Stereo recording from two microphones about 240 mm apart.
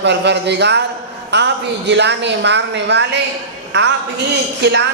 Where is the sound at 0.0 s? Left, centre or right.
Right.